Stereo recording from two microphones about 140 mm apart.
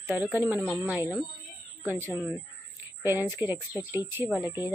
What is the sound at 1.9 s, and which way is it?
Speech, 15° right (ahead or behind).